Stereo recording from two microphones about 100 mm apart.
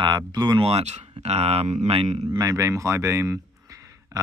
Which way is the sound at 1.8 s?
80° right.